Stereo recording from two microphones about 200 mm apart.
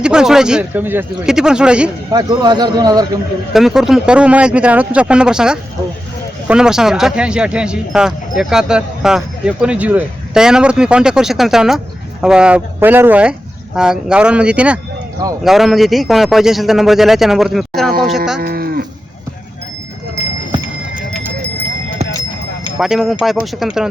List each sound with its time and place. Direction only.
0.0 s speech: 5° right (ahead or behind)
2.1 s speech: 20° right (ahead or behind)
3.5 s speech: centre (ahead or behind)
18.3 s speech: 50° right (ahead or behind)
22.8 s speech: centre (ahead or behind)